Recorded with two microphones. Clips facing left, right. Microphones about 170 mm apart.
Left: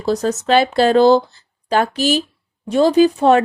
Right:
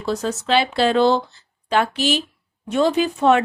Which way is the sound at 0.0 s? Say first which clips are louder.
Left 5 dB; 40° left (ahead or behind).